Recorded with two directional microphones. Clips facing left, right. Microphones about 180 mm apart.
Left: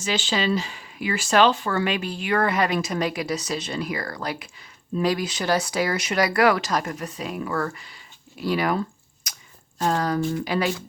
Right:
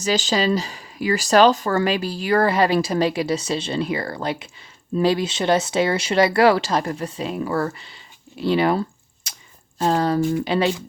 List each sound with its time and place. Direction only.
0.0 s speech: 40° right (ahead or behind)
9.2 s chewing: 30° right (ahead or behind)
9.7 s speech: 30° right (ahead or behind)